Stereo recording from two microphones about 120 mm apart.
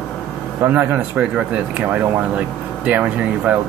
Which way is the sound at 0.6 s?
15° right (ahead or behind).